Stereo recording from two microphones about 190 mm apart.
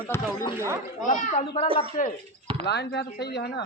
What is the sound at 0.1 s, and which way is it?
Speech, 15° left (ahead or behind).